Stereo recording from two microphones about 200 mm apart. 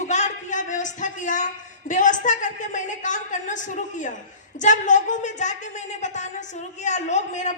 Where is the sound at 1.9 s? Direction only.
40° left (ahead or behind).